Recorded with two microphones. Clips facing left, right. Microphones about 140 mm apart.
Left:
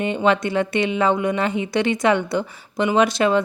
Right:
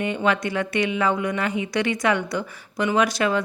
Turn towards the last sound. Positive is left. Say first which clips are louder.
# left 4 dB
turn(degrees=25)  # may be behind; listen again after turning